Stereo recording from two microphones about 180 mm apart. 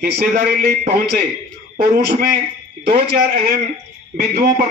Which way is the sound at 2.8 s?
60° right (ahead or behind).